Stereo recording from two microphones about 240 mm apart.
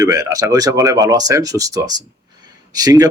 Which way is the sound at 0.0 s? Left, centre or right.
Centre.